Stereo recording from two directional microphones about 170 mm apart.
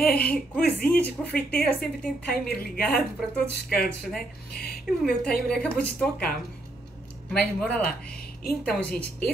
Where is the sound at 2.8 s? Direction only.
5° left (ahead or behind).